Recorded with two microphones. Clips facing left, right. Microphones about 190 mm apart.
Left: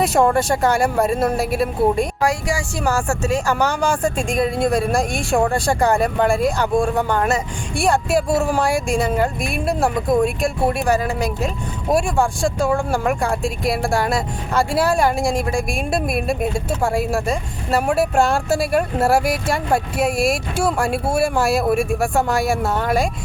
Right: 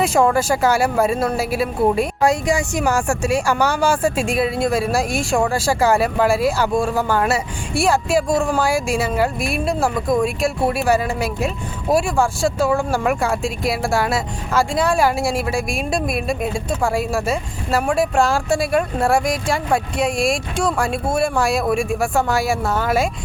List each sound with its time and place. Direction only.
0.0 s speech: centre (ahead or behind)
2.2 s speech: 20° right (ahead or behind); by 23.0 s centre (ahead or behind)